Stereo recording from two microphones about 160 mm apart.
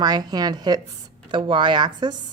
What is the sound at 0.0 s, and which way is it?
A woman's voice, 25° right (ahead or behind).